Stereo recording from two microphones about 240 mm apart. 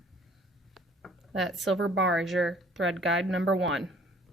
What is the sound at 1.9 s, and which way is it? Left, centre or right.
Speech, right.